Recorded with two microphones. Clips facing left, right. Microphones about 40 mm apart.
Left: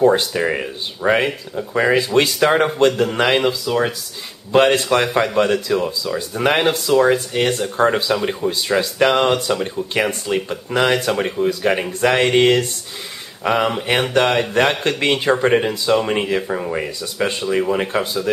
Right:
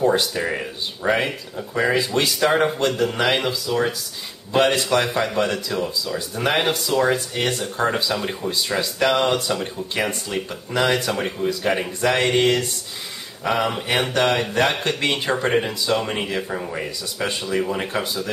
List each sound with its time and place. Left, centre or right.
0.0 s speech: left
12.0 s speech: left
13.5 s speech: centre
16.7 s speech: left